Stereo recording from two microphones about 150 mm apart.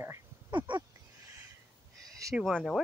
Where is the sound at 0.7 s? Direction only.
30° right (ahead or behind).